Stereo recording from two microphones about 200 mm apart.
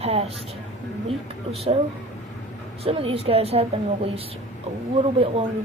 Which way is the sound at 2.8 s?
30° right (ahead or behind).